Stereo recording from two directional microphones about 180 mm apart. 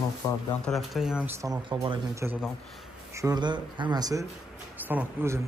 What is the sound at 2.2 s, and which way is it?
A man's voice, 10° right (ahead or behind).